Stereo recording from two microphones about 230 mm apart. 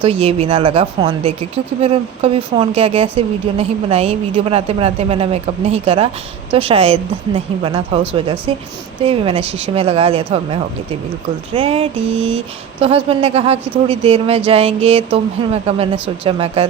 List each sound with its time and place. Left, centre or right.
0.0 s speech: right